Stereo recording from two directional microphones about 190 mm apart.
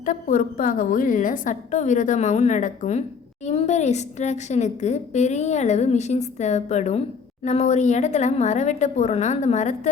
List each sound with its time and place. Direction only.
0.0 s a woman's voice: 45° left (ahead or behind)